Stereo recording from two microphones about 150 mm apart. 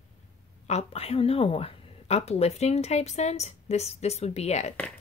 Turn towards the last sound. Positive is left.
turn(degrees=45)  # may be behind; listen again after turning